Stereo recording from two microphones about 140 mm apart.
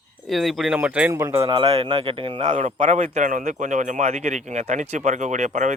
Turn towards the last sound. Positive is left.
turn(degrees=-55)  # may be behind; listen again after turning